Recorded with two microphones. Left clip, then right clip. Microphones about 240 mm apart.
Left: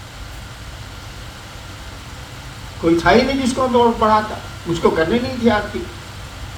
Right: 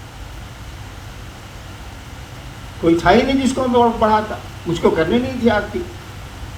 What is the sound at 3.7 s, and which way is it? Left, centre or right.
A man's voice, right.